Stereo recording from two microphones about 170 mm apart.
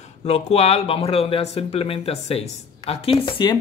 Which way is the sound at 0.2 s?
40° left (ahead or behind).